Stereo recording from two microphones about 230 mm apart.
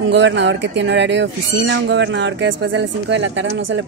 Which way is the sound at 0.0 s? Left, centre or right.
Right.